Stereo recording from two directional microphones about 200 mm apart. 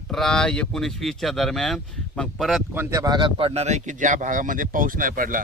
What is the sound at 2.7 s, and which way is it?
Speech, 15° right (ahead or behind).